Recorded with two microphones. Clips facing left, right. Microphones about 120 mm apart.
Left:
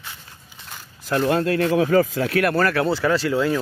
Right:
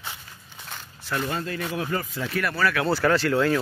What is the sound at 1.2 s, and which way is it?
Speech, 75° left (ahead or behind).